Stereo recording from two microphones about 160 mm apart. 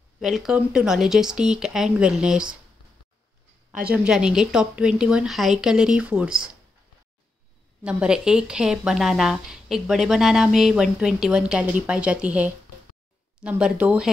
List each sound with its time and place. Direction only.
0.2 s a woman's voice: centre (ahead or behind)
3.9 s a woman's voice: 5° right (ahead or behind)
7.8 s a woman's voice: 5° right (ahead or behind)